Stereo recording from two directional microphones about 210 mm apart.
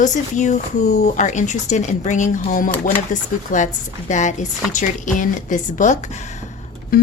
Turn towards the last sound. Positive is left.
turn(degrees=45)  # may be behind; listen again after turning